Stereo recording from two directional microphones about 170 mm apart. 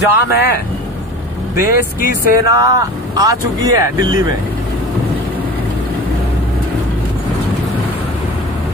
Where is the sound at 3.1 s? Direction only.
20° right (ahead or behind).